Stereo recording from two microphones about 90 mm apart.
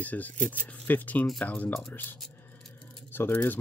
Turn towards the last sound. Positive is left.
turn(degrees=25)  # may be behind; listen again after turning